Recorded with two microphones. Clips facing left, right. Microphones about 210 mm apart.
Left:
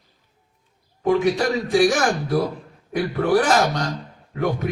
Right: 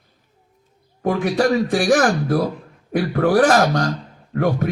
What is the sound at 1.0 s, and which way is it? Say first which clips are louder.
A man's voice: right 1 dB; 55° right (ahead or behind).